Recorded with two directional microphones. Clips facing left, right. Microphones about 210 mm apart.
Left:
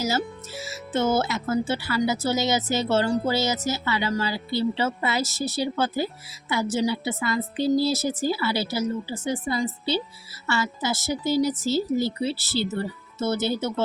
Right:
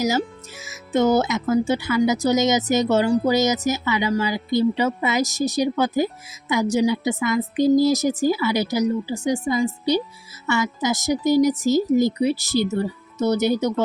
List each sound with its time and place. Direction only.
0.7 s speech: 15° right (ahead or behind)